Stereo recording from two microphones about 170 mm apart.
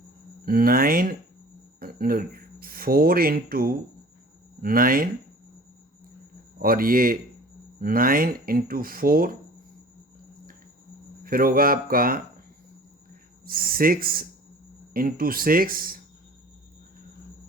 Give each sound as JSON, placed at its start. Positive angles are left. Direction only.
{"t": 0.4, "sound": "speech", "side_deg": -60}
{"t": 6.6, "sound": "speech", "side_deg": -60}
{"t": 11.2, "sound": "speech", "side_deg": -60}
{"t": 13.4, "sound": "speech", "side_deg": -60}